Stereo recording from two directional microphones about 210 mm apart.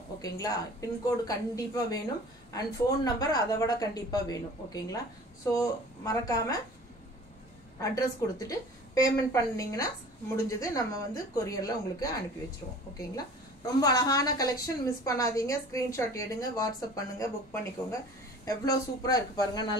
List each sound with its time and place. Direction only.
0.2 s a woman's voice: 15° left (ahead or behind)
5.5 s a woman's voice: 15° left (ahead or behind)
7.8 s a woman's voice: 15° left (ahead or behind)
13.7 s a woman's voice: 15° left (ahead or behind)